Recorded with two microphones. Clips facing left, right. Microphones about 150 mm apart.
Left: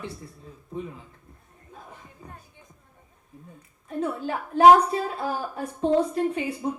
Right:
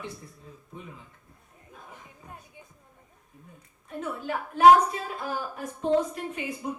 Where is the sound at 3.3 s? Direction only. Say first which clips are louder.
Left 5 dB; 30° left (ahead or behind).